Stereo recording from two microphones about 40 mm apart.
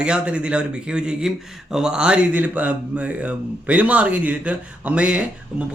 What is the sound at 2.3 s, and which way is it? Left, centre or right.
Speech, right.